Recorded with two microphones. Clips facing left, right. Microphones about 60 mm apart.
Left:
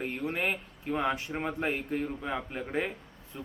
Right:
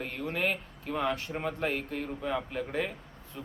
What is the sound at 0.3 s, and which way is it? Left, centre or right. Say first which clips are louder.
A man's voice: right 1 dB; centre.